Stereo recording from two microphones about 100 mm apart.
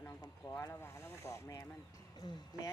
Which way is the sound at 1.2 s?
35° left (ahead or behind).